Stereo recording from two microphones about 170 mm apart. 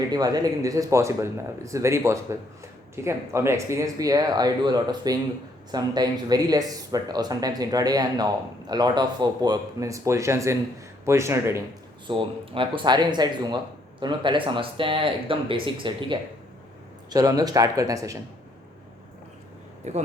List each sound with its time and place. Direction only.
0.1 s speech: 20° right (ahead or behind)
12.0 s speech: 30° right (ahead or behind)
19.8 s speech: 40° right (ahead or behind)